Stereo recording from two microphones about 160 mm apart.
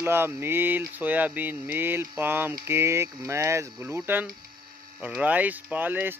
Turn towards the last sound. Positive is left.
turn(degrees=-10)  # may be behind; listen again after turning